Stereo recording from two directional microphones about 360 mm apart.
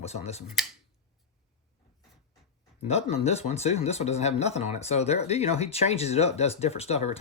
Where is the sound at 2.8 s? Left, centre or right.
Centre.